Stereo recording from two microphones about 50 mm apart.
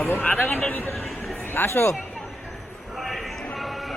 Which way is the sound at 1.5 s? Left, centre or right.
Left.